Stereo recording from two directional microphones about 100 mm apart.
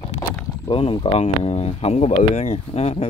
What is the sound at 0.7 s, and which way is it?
Speech, 60° left (ahead or behind).